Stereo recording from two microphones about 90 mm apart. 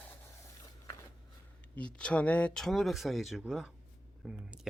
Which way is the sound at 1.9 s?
10° left (ahead or behind).